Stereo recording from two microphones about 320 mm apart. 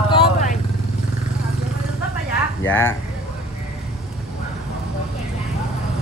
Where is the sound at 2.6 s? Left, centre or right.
Centre.